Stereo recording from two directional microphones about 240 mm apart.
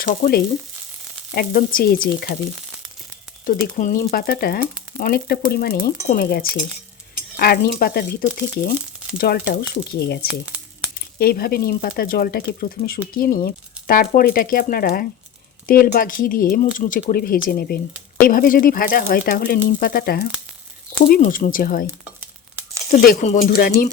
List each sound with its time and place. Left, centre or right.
0.0 s speech: left
3.4 s speech: left
11.2 s speech: left
22.9 s speech: left